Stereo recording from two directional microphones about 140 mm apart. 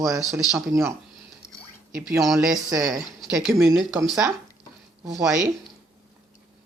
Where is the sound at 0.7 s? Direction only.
20° right (ahead or behind).